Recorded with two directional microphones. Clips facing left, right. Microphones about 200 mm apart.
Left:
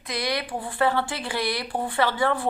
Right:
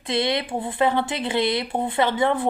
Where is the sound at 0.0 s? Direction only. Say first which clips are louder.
Right 5 dB; 25° right (ahead or behind).